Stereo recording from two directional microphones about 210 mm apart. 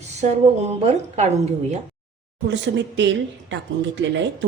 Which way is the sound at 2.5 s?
60° right (ahead or behind).